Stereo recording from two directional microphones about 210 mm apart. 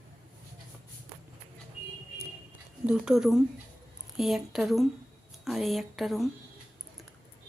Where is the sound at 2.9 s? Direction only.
5° right (ahead or behind).